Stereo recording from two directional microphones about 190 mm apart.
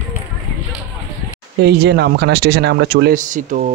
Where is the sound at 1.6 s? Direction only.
60° right (ahead or behind).